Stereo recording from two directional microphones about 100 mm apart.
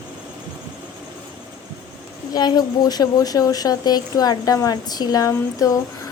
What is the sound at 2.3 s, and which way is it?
A woman's voice, 45° left (ahead or behind).